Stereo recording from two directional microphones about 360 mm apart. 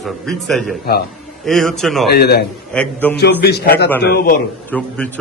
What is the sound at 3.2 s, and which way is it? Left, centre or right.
A man's voice, left.